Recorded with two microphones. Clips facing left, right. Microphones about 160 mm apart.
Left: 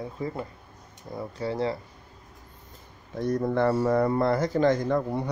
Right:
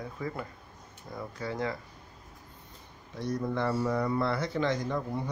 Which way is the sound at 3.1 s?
50° left (ahead or behind).